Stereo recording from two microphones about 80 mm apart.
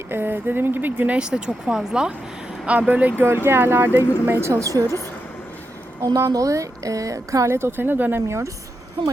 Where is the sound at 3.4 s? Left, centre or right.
Right.